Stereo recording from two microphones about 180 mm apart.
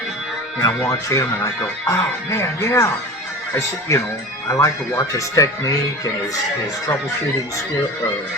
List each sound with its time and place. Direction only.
1.1 s speech: 15° left (ahead or behind)